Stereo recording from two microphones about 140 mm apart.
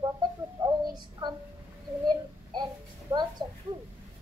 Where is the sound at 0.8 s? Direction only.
30° right (ahead or behind).